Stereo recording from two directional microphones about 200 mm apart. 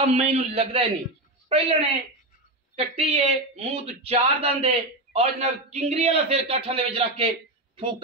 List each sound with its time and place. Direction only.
0.0 s a woman's voice: 35° right (ahead or behind)